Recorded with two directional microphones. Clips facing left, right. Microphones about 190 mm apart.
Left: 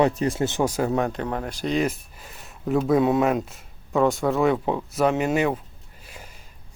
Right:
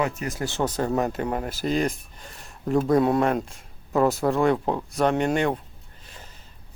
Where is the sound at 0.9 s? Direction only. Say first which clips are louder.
Even; 5° right (ahead or behind).